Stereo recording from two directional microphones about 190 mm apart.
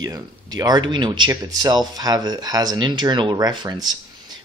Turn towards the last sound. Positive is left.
turn(degrees=-20)  # may be behind; listen again after turning